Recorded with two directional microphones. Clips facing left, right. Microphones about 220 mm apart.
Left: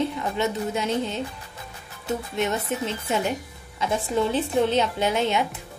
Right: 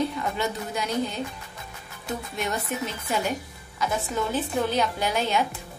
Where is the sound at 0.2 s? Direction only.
25° left (ahead or behind).